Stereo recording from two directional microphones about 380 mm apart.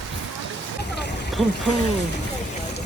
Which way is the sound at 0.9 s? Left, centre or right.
Left.